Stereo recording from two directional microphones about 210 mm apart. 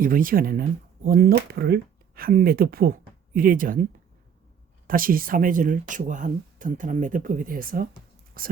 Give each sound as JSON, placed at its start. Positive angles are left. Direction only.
{"t": 0.0, "sound": "speech", "side_deg": -40}
{"t": 4.9, "sound": "speech", "side_deg": -40}